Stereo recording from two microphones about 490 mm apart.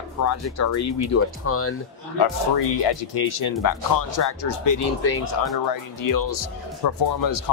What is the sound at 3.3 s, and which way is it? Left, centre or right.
Speech, left.